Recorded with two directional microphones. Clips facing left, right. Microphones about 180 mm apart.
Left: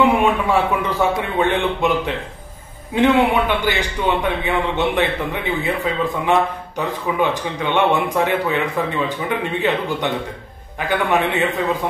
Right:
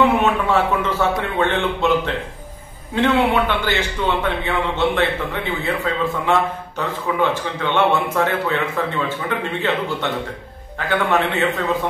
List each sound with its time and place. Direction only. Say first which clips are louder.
0.0 s a man's voice: left 1 dB; 10° left (ahead or behind)